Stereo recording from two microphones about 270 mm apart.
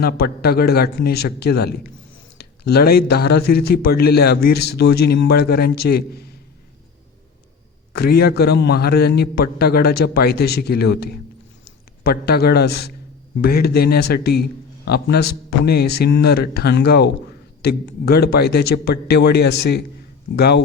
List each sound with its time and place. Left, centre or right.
0.0 s speech: left
7.9 s speech: left